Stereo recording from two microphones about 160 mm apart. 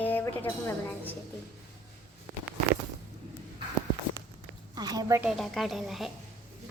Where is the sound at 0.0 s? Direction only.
10° left (ahead or behind).